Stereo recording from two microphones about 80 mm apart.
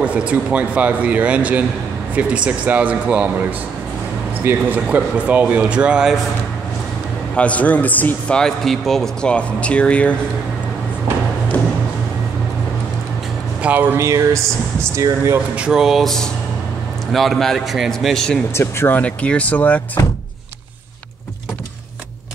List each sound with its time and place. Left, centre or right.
0.0 s speech: centre
4.5 s speech: centre
7.3 s speech: centre
8.4 s speech: centre
13.6 s speech: right
13.9 s speech: right
15.5 s a man's voice: centre
18.5 s speech: left